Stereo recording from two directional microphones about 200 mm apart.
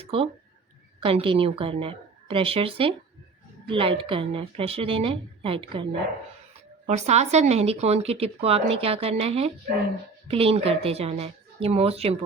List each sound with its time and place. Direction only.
0.0 s a woman's voice: 30° right (ahead or behind)